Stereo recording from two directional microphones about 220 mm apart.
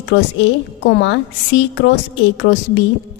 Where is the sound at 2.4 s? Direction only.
55° left (ahead or behind).